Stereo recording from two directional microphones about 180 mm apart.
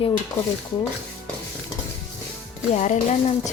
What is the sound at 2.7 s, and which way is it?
Stir, 40° left (ahead or behind).